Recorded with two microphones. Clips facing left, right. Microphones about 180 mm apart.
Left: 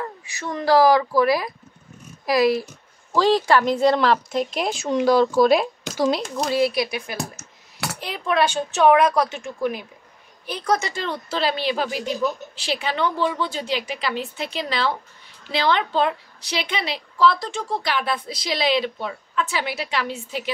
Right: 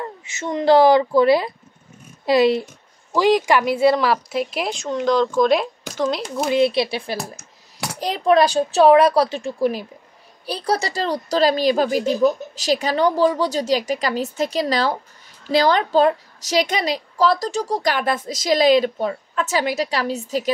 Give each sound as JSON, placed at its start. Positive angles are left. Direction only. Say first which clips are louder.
{"t": 0.0, "sound": "speech", "louder": "right 2 dB", "side_deg": -20}
{"t": 3.1, "sound": "speech", "louder": "right 1 dB", "side_deg": -15}
{"t": 6.2, "sound": "speech", "louder": "right 2 dB", "side_deg": -5}
{"t": 6.5, "sound": "a woman's voice", "louder": "right 4 dB", "side_deg": -25}